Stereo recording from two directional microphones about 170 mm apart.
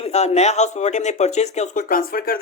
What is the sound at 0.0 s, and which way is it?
Speech, 40° left (ahead or behind).